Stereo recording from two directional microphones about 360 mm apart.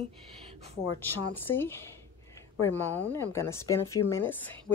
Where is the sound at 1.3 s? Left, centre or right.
Centre.